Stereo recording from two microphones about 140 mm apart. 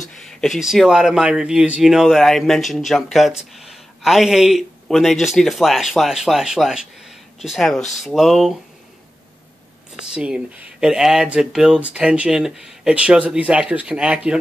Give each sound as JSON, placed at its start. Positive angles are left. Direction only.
{"t": 0.2, "sound": "speech", "side_deg": 0}
{"t": 10.1, "sound": "speech", "side_deg": -5}